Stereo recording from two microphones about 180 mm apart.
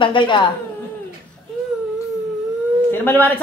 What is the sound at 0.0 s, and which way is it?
Speech, 25° left (ahead or behind).